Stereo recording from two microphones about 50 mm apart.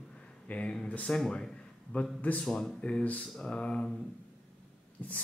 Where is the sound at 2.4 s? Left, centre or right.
Centre.